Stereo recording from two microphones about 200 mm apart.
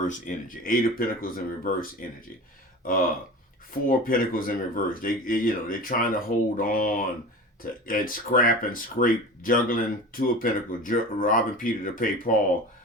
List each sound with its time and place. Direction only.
0.1 s speech: 40° left (ahead or behind)